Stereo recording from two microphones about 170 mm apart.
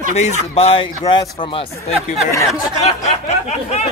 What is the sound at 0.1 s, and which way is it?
Speech, 40° left (ahead or behind).